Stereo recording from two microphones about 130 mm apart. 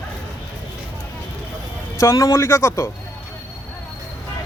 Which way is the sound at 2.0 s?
25° left (ahead or behind).